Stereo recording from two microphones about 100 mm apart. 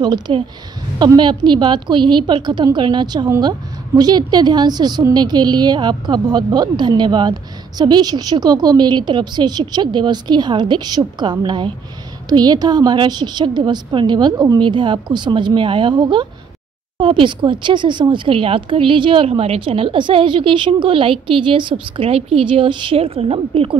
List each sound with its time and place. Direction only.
0.0 s a woman's voice: 45° right (ahead or behind); by 23.8 s 65° right (ahead or behind)